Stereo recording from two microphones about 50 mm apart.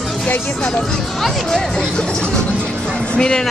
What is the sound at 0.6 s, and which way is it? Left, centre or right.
Speech, centre.